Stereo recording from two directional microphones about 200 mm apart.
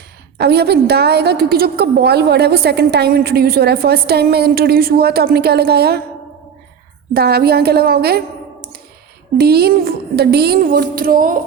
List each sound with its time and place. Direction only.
0.3 s a woman's voice: 55° right (ahead or behind)
7.1 s a woman's voice: 50° right (ahead or behind)
9.4 s a woman's voice: 50° right (ahead or behind)